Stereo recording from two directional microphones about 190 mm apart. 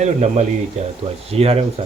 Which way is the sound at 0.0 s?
35° right (ahead or behind).